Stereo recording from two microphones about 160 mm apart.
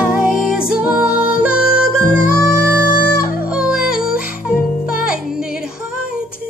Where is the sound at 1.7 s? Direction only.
60° left (ahead or behind).